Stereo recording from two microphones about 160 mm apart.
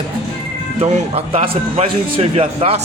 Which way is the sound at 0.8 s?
35° right (ahead or behind).